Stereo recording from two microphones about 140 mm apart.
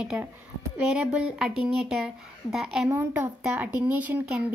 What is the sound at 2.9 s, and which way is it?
A woman's voice, 15° right (ahead or behind).